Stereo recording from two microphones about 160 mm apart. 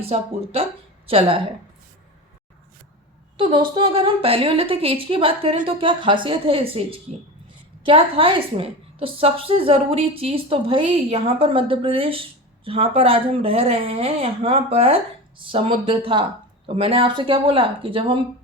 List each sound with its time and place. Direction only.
0.1 s a woman's voice: 40° right (ahead or behind)
3.3 s a woman's voice: 30° right (ahead or behind)
7.9 s a woman's voice: 35° right (ahead or behind)